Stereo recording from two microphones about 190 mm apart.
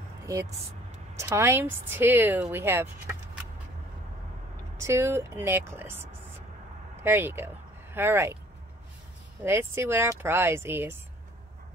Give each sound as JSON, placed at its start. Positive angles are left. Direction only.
{"t": 0.3, "sound": "a woman's voice", "side_deg": -15}
{"t": 4.7, "sound": "a woman's voice", "side_deg": -15}
{"t": 9.4, "sound": "a woman's voice", "side_deg": -10}